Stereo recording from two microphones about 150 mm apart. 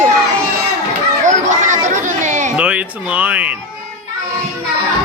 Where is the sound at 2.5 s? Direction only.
10° right (ahead or behind).